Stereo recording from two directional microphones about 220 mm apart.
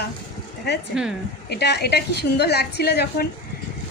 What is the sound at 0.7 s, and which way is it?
A woman's voice, 50° left (ahead or behind).